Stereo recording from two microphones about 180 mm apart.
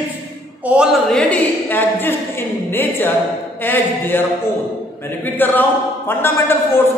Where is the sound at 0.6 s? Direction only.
5° right (ahead or behind).